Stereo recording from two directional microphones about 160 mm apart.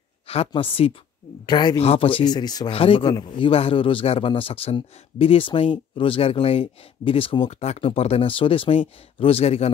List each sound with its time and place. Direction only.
0.3 s speech: 35° left (ahead or behind)